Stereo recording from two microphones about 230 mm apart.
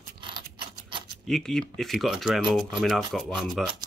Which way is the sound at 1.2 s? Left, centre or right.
Centre.